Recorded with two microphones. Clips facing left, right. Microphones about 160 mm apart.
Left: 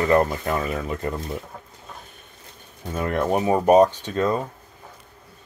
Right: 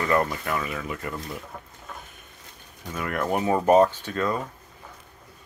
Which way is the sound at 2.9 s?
30° left (ahead or behind).